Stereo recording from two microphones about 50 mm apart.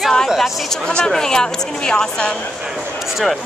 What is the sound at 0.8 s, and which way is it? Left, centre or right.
A woman's voice, centre.